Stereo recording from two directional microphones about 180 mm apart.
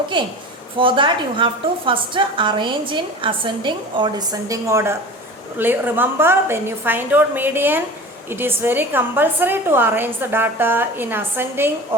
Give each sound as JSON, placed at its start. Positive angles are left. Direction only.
{"t": 0.1, "sound": "a woman's voice", "side_deg": -25}